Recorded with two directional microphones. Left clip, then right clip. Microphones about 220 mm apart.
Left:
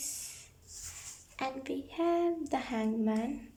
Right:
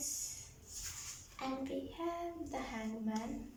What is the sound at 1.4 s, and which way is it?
Speech, 45° left (ahead or behind).